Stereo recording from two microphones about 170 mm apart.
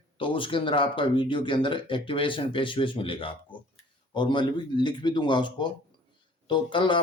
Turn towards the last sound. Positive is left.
turn(degrees=30)  # may be behind; listen again after turning